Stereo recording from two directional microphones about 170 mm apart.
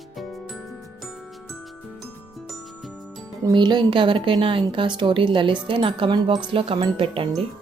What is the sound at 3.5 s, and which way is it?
A woman's voice, 25° right (ahead or behind).